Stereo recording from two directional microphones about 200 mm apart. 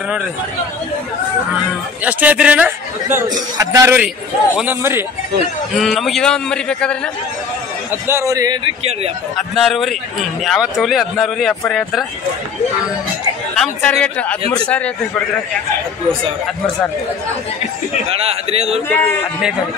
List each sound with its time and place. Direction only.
2.0 s speech: 5° right (ahead or behind)
5.8 s speech: centre (ahead or behind)
7.9 s speech: 15° right (ahead or behind)
9.4 s speech: centre (ahead or behind)
13.6 s speech: 5° left (ahead or behind)
18.1 s a man's voice: 30° right (ahead or behind)
18.9 s speech: 10° left (ahead or behind)